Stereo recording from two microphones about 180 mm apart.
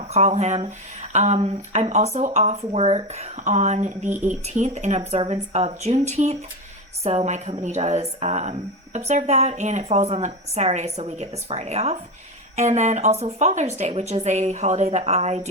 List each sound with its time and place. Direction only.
0.1 s speech: 40° right (ahead or behind)